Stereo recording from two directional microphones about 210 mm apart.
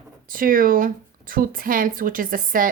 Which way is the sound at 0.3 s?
40° right (ahead or behind).